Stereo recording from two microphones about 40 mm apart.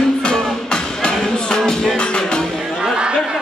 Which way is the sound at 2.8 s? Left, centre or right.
Right.